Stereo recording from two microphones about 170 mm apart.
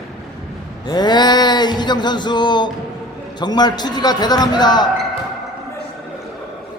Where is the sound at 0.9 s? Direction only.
25° left (ahead or behind).